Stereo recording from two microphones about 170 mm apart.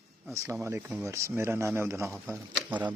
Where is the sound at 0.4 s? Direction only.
10° right (ahead or behind).